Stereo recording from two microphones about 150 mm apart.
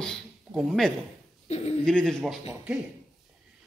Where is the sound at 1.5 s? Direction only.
45° left (ahead or behind).